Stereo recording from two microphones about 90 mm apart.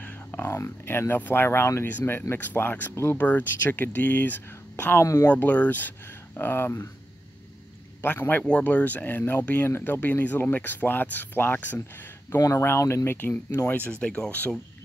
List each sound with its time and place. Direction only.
0.0 s speech: 25° left (ahead or behind)
5.0 s speech: 40° left (ahead or behind)
5.3 s speech: 15° left (ahead or behind)
8.0 s speech: 20° left (ahead or behind)
12.4 s speech: 40° left (ahead or behind); by 14.5 s 15° left (ahead or behind)